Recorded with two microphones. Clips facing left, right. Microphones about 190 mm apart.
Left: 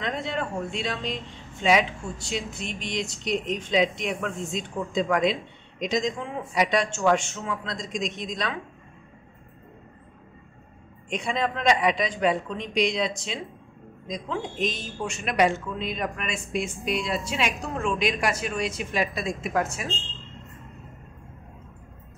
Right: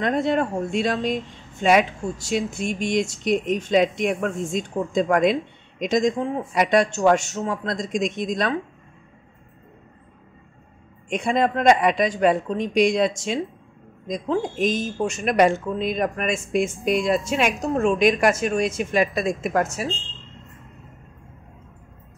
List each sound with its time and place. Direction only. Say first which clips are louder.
0.0 s speech: right 8 dB; 50° right (ahead or behind)
6.1 s speech: right 8 dB; 35° right (ahead or behind)
6.5 s speech: right 4 dB; 50° right (ahead or behind)
11.1 s speech: right 6 dB; 50° right (ahead or behind)